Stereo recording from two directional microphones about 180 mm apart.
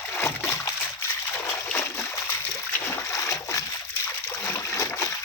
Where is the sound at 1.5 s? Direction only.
10° left (ahead or behind).